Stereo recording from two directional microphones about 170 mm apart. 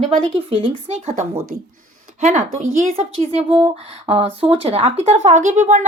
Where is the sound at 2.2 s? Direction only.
45° right (ahead or behind).